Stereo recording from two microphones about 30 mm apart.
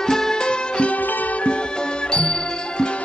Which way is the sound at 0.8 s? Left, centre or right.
Left.